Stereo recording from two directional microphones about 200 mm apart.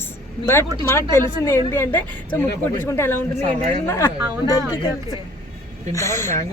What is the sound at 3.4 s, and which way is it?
Speech, 35° right (ahead or behind).